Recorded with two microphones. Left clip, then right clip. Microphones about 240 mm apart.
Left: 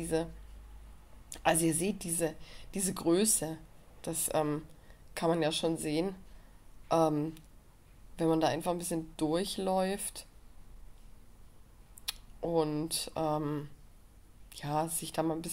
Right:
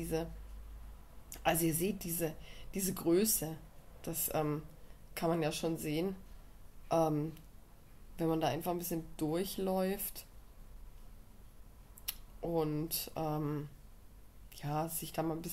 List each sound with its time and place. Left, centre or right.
0.0 s speech: left
1.3 s a woman's voice: left
12.4 s a woman's voice: left